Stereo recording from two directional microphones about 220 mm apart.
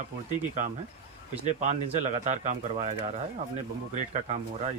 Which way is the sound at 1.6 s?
30° right (ahead or behind).